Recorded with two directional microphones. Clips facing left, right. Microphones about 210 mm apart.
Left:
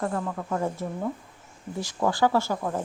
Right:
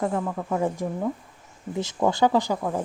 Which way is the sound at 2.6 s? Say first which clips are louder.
Right 2 dB; 5° right (ahead or behind).